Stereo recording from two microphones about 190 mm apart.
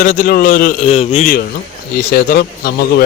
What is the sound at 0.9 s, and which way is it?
A man's voice, 35° left (ahead or behind).